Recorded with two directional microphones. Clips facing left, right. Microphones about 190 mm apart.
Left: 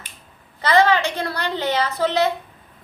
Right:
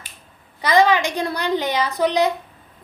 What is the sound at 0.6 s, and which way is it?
A woman's voice, 15° right (ahead or behind).